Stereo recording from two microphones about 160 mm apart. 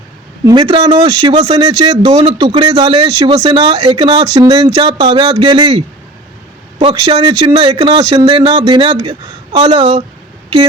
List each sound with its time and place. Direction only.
0.4 s speech: 30° right (ahead or behind)
1.3 s speech: 40° right (ahead or behind)
2.0 s a man's voice: 30° right (ahead or behind)